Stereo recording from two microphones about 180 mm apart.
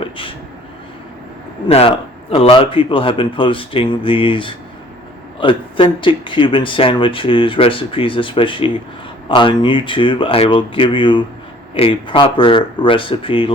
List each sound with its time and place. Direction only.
1.6 s speech: 30° left (ahead or behind)